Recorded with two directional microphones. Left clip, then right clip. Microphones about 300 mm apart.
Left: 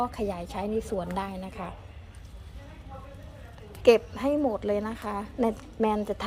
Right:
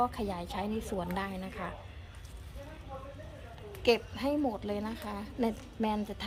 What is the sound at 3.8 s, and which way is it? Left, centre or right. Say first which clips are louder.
A woman's voice: left 8 dB; centre.